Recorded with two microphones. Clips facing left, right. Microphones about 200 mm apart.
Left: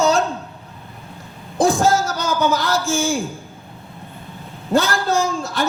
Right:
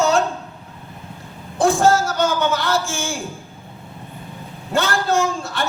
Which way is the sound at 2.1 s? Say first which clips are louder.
Even; 40° left (ahead or behind).